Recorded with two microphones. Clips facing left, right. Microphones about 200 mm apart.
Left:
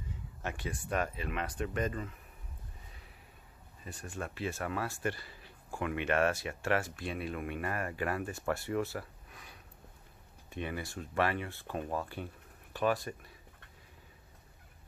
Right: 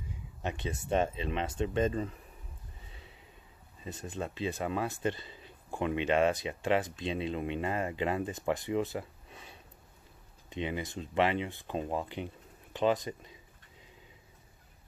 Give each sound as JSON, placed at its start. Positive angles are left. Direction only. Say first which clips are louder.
{"t": 0.4, "sound": "speech", "louder": "right 3 dB", "side_deg": -20}
{"t": 3.8, "sound": "speech", "louder": "right 4 dB", "side_deg": -20}